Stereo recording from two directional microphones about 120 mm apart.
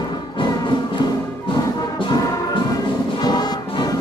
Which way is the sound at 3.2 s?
35° left (ahead or behind).